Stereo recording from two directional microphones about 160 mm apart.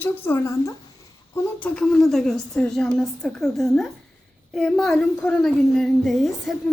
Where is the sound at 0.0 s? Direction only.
10° left (ahead or behind).